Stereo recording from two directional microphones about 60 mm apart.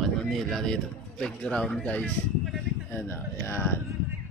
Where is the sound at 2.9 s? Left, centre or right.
Left.